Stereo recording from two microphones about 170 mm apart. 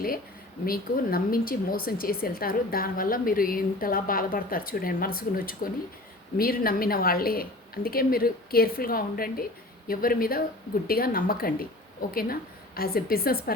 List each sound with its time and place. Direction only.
0.6 s speech: 60° left (ahead or behind)